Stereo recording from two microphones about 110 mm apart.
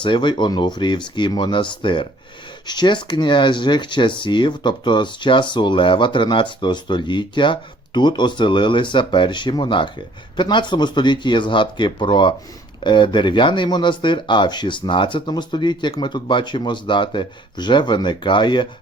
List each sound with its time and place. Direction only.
0.0 s speech: 45° left (ahead or behind)